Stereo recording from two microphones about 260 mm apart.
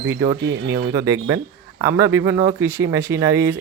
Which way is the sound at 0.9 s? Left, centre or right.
Centre.